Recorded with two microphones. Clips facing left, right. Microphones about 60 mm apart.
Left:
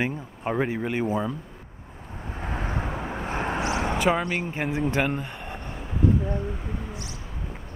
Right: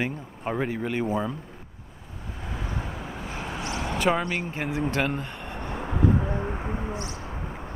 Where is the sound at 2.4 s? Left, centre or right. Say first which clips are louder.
Left 4 dB; left.